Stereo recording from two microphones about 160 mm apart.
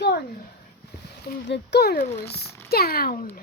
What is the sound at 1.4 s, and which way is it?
Speech, 90° left.